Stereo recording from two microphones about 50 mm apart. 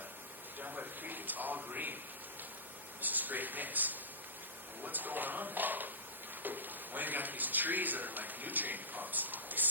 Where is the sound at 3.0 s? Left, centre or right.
Right.